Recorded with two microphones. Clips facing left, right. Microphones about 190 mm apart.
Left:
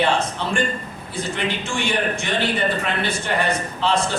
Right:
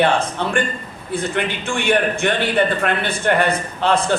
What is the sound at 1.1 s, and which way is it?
A man's voice, 55° right (ahead or behind).